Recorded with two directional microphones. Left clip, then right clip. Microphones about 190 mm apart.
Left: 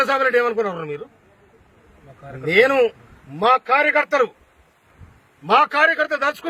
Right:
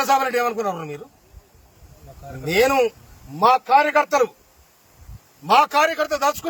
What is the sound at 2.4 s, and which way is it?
A man's voice, 20° right (ahead or behind).